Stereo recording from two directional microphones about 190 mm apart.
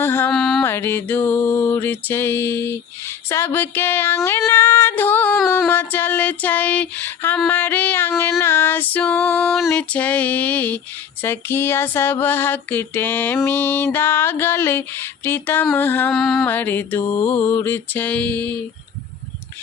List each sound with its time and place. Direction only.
0.0 s mantra: 10° left (ahead or behind)
3.2 s female singing: 15° left (ahead or behind)
17.0 s mantra: 25° left (ahead or behind)
17.5 s female singing: 10° left (ahead or behind)